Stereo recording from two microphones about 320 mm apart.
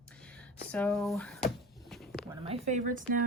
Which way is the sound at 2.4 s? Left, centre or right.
Right.